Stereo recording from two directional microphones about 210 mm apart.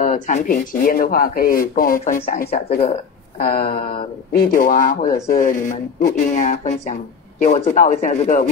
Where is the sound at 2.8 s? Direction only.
30° left (ahead or behind).